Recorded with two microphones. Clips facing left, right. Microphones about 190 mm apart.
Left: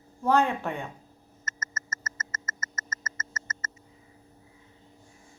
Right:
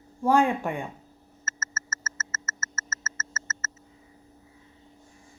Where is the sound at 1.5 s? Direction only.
15° left (ahead or behind).